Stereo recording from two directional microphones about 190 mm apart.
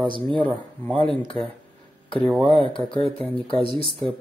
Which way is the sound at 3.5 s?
30° left (ahead or behind).